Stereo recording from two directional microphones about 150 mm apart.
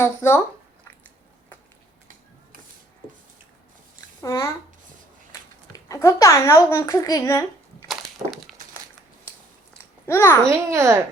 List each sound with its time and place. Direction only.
0.0 s speech: 15° left (ahead or behind)
4.2 s a child's voice: 20° left (ahead or behind)
7.9 s crushing: centre (ahead or behind)
10.1 s speech: 20° left (ahead or behind)
10.5 s a child's voice: 20° right (ahead or behind)